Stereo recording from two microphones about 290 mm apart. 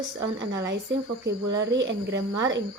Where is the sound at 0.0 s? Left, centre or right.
Right.